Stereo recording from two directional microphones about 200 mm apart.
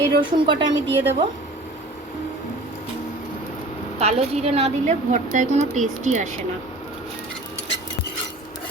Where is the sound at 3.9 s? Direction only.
30° right (ahead or behind).